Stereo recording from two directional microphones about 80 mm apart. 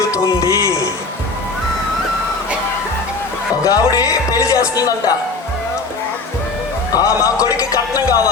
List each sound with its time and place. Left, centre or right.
0.1 s speech: left
3.5 s speech: left
6.9 s speech: left